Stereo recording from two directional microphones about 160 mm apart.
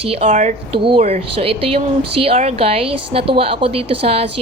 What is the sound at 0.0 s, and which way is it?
Speech, 40° right (ahead or behind).